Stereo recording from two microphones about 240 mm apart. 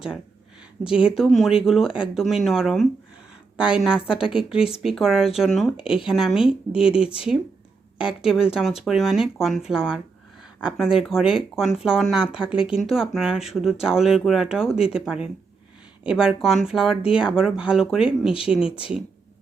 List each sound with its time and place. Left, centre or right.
0.8 s speech: centre
7.0 s speech: left
8.0 s speech: centre